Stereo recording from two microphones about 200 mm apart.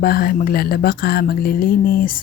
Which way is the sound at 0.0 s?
50° left (ahead or behind).